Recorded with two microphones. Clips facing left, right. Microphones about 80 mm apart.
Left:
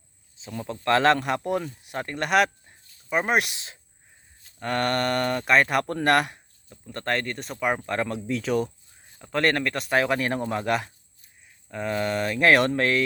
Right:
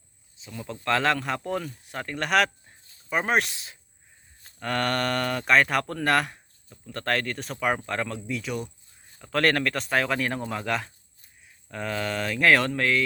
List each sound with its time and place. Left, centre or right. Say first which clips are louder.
0.6 s speech: left 4 dB; left
2.0 s speech: left 2 dB; left
2.2 s speech: left 2 dB; centre
4.7 s mantra: left 2 dB; centre
5.2 s speech: right 1 dB; centre
7.1 s mantra: even; centre
7.5 s speech: even; centre
8.0 s speech: left 4 dB; left
9.3 s mantra: even; centre
9.6 s speech: left 2 dB; centre